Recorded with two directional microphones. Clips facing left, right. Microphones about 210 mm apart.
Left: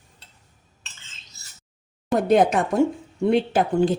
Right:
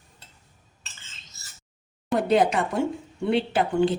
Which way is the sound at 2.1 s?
45° left (ahead or behind).